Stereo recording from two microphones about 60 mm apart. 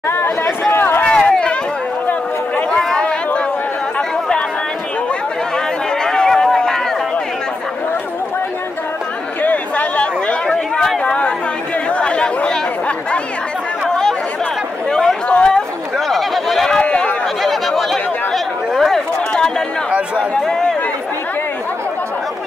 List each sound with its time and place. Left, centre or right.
0.1 s chatter: left
1.0 s run: centre
2.8 s chatter: centre
6.0 s chatter: centre
9.4 s a sound: left
10.4 s chatter: centre
11.9 s chatter: centre
13.8 s chatter: centre
14.9 s a sound: centre
15.2 s chatter: centre
16.1 s a sound: centre
16.8 s chatter: left
17.4 s chatter: centre
20.3 s a sound: centre